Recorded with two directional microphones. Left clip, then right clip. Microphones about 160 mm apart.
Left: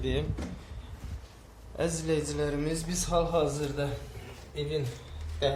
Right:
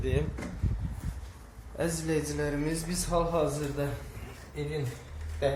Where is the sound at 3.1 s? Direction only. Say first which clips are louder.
Left 1 dB; 20° left (ahead or behind).